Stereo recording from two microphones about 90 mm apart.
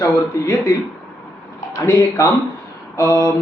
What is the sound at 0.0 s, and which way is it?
Speech, 40° left (ahead or behind).